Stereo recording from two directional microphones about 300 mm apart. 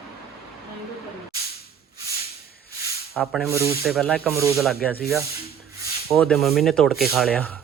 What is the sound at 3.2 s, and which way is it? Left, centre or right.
Speech, centre.